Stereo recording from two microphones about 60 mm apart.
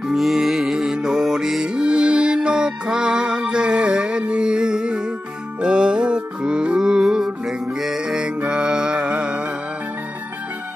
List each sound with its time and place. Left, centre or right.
0.1 s music: centre